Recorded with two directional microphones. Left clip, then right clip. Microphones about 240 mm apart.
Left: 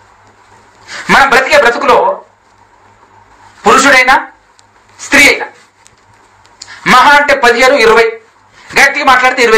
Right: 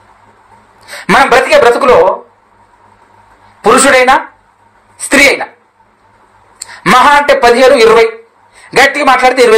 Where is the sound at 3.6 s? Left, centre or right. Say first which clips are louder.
Even; right.